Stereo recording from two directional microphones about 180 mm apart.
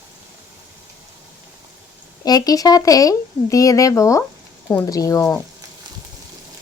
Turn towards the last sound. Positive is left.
turn(degrees=15)  # may be behind; listen again after turning